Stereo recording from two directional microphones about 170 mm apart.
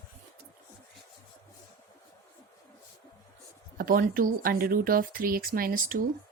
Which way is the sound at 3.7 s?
55° right (ahead or behind).